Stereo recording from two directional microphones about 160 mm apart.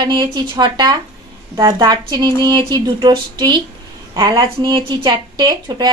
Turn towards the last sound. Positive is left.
turn(degrees=-25)  # may be behind; listen again after turning